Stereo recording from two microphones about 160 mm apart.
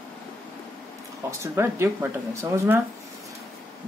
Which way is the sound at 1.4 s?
15° right (ahead or behind).